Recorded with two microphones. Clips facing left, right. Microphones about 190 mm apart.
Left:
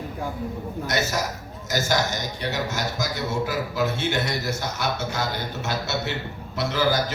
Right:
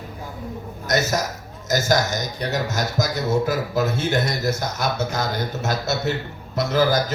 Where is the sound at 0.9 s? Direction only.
40° right (ahead or behind).